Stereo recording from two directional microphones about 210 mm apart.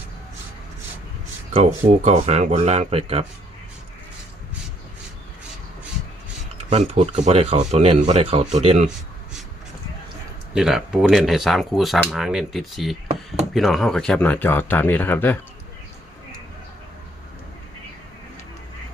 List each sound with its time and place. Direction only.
2.0 s speech: 30° right (ahead or behind)
6.7 s speech: 30° right (ahead or behind)
10.5 s speech: centre (ahead or behind)